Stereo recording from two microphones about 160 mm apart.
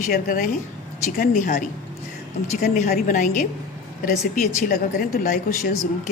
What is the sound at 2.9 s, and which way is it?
A woman's voice, 55° left (ahead or behind).